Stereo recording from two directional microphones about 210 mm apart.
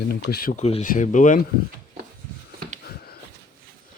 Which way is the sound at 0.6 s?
35° left (ahead or behind).